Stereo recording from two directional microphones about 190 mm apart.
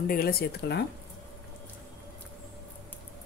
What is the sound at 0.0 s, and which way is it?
Speech, 50° left (ahead or behind).